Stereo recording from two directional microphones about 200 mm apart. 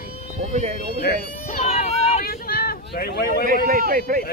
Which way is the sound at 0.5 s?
35° right (ahead or behind).